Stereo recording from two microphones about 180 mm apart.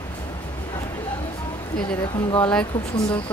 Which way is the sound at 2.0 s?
25° left (ahead or behind).